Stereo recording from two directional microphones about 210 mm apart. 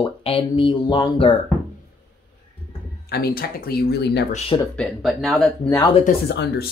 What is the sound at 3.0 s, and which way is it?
Speech, 50° left (ahead or behind).